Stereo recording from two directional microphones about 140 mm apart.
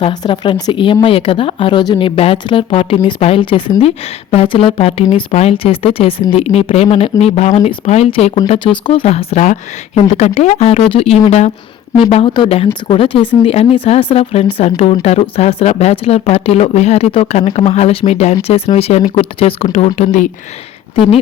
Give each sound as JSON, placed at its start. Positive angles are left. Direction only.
{"t": 0.0, "sound": "a woman's voice", "side_deg": 35}
{"t": 12.1, "sound": "a woman's voice", "side_deg": 35}